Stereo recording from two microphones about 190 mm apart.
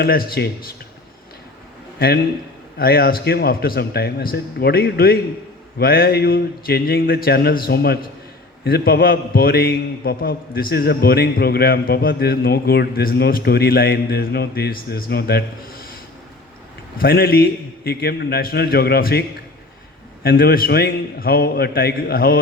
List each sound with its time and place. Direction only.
0.0 s a man's voice: 50° left (ahead or behind)
2.7 s a man's voice: 55° left (ahead or behind)
17.0 s a man's voice: 50° left (ahead or behind)
20.2 s a man's voice: 50° left (ahead or behind)